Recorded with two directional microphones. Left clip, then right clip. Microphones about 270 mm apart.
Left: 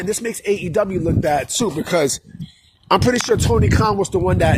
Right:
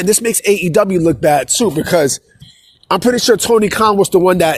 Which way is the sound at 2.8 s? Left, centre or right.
Right.